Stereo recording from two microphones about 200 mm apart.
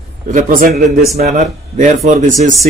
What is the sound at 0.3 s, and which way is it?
Speech, 40° right (ahead or behind).